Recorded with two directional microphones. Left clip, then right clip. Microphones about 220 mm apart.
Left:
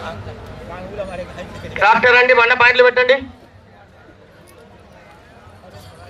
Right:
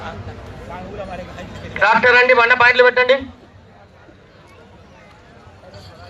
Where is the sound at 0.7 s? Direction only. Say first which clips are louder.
Left 3 dB; 50° left (ahead or behind).